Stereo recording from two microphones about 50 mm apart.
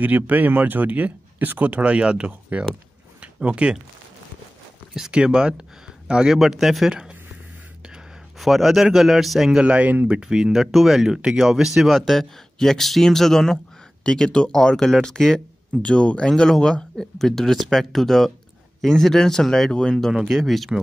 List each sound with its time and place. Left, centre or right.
0.0 s speech: right
3.2 s a sound: right
4.9 s speech: centre
6.9 s speech: centre
8.4 s a man's voice: centre
9.5 s speech: right
10.0 s speech: centre
11.1 s speech: centre
11.9 s speech: centre
20.1 s speech: centre